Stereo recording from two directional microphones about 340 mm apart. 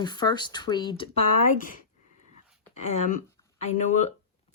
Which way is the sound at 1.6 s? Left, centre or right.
Left.